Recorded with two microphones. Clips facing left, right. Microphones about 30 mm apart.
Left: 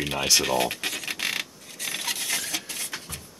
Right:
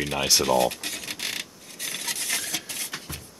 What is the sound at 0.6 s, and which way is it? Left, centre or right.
Speech, left.